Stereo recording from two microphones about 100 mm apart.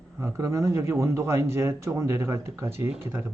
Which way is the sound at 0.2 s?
30° right (ahead or behind).